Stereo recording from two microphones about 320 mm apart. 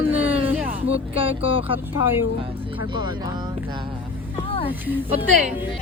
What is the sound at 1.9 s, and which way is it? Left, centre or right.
Speech, left.